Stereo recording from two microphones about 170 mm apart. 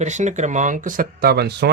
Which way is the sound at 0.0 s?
45° right (ahead or behind).